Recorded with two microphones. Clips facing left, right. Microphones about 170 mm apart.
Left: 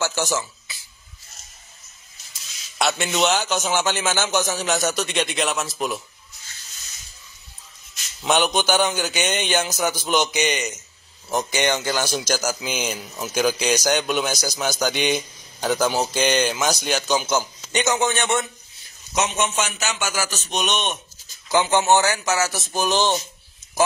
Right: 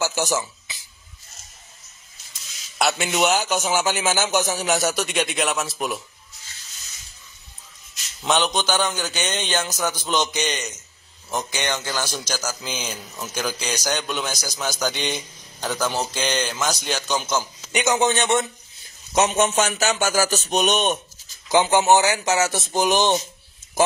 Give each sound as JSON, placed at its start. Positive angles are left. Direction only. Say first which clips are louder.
{"t": 0.0, "sound": "speech", "louder": "right 1 dB", "side_deg": -15}
{"t": 2.8, "sound": "a man's voice", "louder": "even", "side_deg": -5}
{"t": 8.2, "sound": "a man's voice", "louder": "left 1 dB", "side_deg": 5}
{"t": 17.8, "sound": "a man's voice", "louder": "right 3 dB", "side_deg": -20}
{"t": 19.1, "sound": "a man's voice", "louder": "right 4 dB", "side_deg": -40}
{"t": 21.5, "sound": "a man's voice", "louder": "right 1 dB", "side_deg": -15}